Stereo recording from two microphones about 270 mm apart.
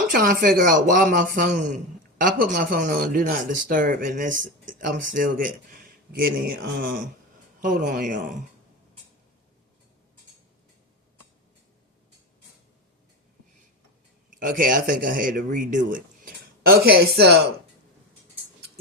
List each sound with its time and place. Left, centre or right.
0.1 s speech: right
14.3 s speech: right